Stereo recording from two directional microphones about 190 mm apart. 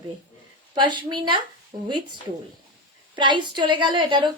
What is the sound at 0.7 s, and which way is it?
Speech, 25° right (ahead or behind).